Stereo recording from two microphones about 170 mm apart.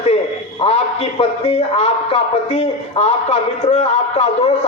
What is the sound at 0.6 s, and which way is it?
A man's voice, 35° left (ahead or behind).